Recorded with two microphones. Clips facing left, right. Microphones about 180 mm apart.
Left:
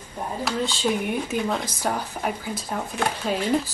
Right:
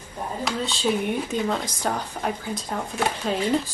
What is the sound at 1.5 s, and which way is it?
Speech, 10° left (ahead or behind).